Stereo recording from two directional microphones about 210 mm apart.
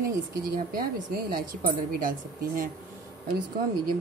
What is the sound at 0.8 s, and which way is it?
Speech, 40° right (ahead or behind).